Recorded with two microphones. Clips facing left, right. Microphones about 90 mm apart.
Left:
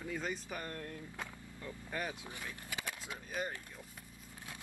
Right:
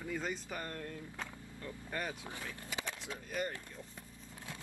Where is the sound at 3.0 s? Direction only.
20° left (ahead or behind).